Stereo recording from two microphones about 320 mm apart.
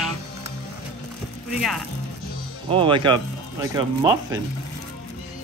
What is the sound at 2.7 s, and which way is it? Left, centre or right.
Speech, centre.